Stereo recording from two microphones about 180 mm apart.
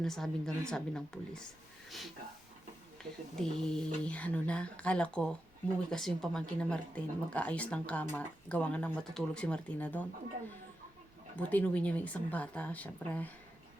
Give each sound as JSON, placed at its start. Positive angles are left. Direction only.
{"t": 0.0, "sound": "speech", "side_deg": 5}
{"t": 3.0, "sound": "a woman's voice", "side_deg": 5}
{"t": 11.3, "sound": "a woman's voice", "side_deg": 10}